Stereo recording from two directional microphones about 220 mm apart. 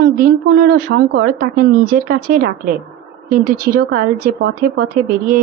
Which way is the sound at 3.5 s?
45° right (ahead or behind).